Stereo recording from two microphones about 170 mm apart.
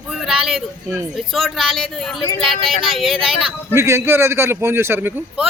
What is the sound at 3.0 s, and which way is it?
Speech, centre (ahead or behind).